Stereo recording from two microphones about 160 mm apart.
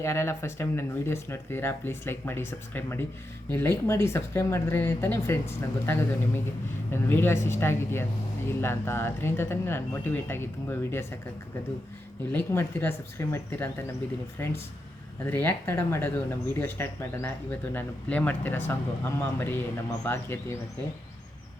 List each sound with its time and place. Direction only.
0.0 s speech: 15° left (ahead or behind)
12.3 s speech: 10° left (ahead or behind)